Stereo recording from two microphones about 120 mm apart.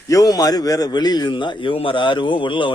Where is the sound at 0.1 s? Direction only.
30° left (ahead or behind).